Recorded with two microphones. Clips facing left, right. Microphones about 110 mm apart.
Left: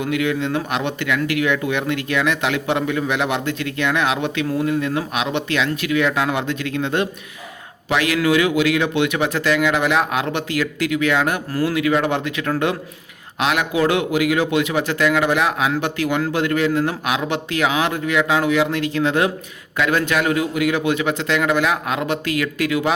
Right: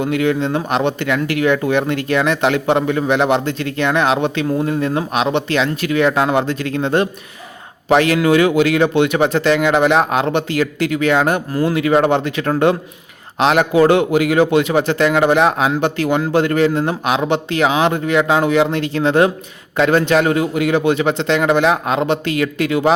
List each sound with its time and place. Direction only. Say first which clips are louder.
0.0 s a man's voice: right 4 dB; 35° right (ahead or behind)